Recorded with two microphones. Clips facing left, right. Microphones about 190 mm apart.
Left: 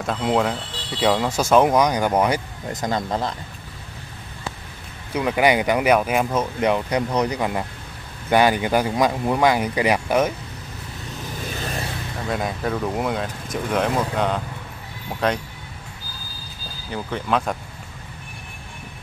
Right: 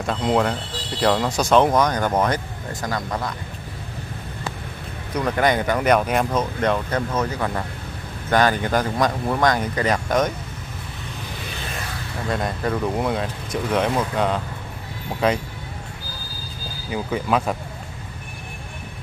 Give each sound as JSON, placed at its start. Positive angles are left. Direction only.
{"t": 0.0, "sound": "speech", "side_deg": 0}
{"t": 2.8, "sound": "speech", "side_deg": 25}
{"t": 5.1, "sound": "speech", "side_deg": 10}
{"t": 12.3, "sound": "speech", "side_deg": 0}
{"t": 16.9, "sound": "speech", "side_deg": -5}